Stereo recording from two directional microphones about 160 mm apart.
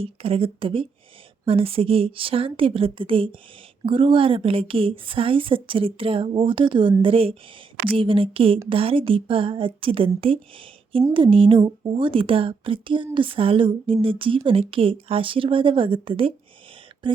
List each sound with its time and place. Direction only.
0.0 s speech: 35° right (ahead or behind)